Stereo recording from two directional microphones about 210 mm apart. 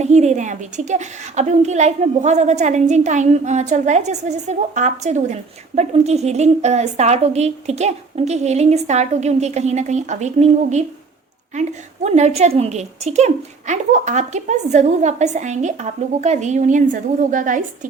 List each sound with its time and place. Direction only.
0.0 s a woman's voice: 30° right (ahead or behind)
12.0 s a woman's voice: 30° right (ahead or behind)